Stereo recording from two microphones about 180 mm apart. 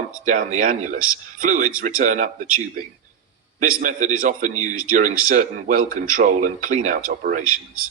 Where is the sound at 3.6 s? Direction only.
45° right (ahead or behind).